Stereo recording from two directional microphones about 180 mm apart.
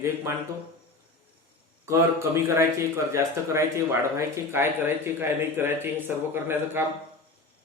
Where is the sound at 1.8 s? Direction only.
15° right (ahead or behind).